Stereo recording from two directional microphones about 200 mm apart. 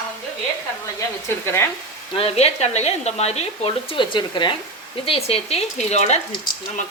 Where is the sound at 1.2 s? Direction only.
10° left (ahead or behind).